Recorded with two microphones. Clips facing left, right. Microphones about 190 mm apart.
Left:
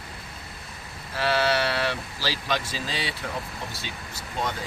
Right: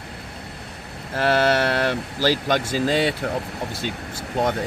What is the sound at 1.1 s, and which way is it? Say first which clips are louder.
Speech: right 5 dB; 50° right (ahead or behind).